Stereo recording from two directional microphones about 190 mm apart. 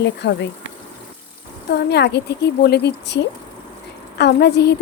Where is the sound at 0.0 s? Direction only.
65° left (ahead or behind).